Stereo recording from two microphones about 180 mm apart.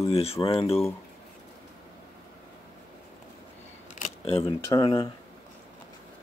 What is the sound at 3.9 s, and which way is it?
Camera, 35° left (ahead or behind).